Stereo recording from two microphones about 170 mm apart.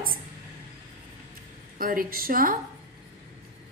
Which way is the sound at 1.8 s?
55° right (ahead or behind).